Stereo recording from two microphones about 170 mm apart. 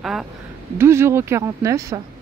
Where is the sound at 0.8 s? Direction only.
15° right (ahead or behind).